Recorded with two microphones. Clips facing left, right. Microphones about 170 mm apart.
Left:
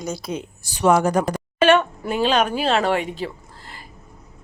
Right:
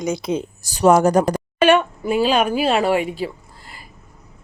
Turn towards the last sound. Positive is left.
turn(degrees=40)  # may be behind; listen again after turning